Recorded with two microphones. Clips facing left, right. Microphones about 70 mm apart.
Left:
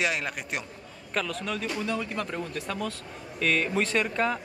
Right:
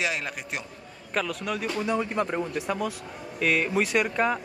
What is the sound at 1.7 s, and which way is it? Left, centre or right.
Speech, right.